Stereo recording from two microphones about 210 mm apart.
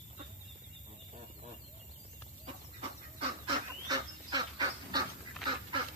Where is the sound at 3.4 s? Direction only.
20° right (ahead or behind).